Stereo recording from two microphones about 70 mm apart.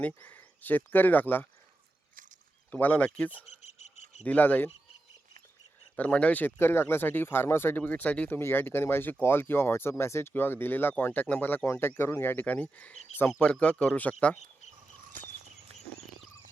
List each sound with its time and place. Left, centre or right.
0.2 s speech: left
2.7 s speech: left
6.0 s speech: centre
6.6 s speech: left
8.3 s speech: left; by 14.3 s centre